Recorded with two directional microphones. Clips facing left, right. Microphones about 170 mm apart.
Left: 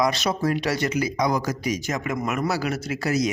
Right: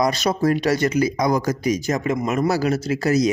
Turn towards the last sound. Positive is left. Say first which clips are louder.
# right 5 dB
turn(degrees=-40)  # may be behind; listen again after turning